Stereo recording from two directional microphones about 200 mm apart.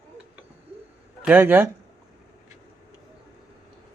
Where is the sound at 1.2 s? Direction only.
10° right (ahead or behind).